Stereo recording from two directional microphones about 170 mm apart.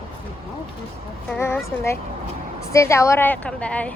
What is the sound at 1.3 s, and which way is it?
A woman's voice, 15° left (ahead or behind).